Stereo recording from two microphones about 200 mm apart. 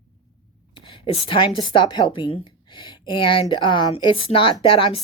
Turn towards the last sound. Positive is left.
turn(degrees=25)  # may be behind; listen again after turning